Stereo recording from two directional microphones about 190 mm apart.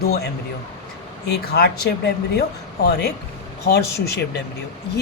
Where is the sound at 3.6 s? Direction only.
60° left (ahead or behind).